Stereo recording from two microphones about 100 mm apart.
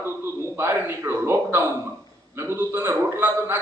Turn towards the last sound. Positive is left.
turn(degrees=-20)  # may be behind; listen again after turning